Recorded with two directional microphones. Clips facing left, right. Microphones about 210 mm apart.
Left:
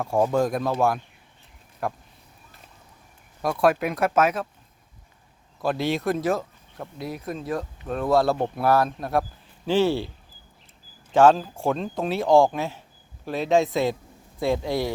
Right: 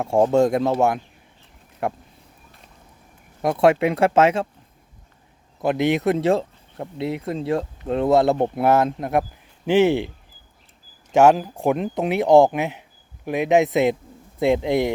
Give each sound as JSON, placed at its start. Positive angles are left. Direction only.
{"t": 0.0, "sound": "speech", "side_deg": -25}
{"t": 3.4, "sound": "speech", "side_deg": -25}
{"t": 5.5, "sound": "speech", "side_deg": -20}
{"t": 11.1, "sound": "speech", "side_deg": -15}